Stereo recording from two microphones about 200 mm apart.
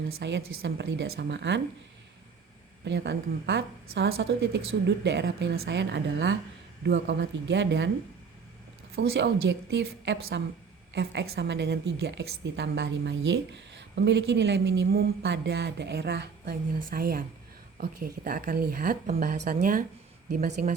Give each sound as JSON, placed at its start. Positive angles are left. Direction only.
{"t": 0.2, "sound": "a woman's voice", "side_deg": -60}
{"t": 2.8, "sound": "a woman's voice", "side_deg": -60}
{"t": 9.0, "sound": "a woman's voice", "side_deg": -60}